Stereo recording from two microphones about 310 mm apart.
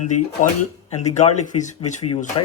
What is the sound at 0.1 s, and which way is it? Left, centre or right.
Speech, left.